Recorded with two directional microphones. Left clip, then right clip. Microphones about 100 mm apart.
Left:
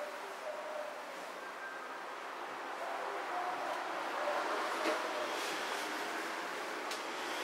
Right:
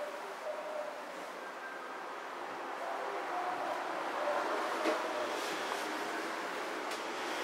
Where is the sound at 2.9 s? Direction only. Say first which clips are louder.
Right 1 dB; 25° right (ahead or behind).